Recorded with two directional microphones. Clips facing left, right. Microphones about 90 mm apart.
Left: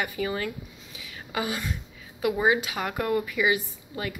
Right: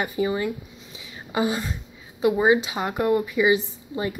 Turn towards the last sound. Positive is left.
turn(degrees=-25)  # may be behind; listen again after turning